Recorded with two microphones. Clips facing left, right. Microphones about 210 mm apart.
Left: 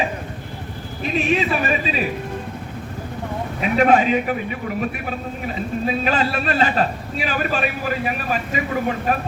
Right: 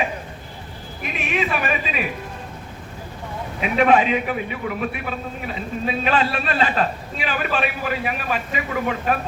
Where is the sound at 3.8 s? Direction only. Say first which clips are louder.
Left 1 dB; 45° left (ahead or behind).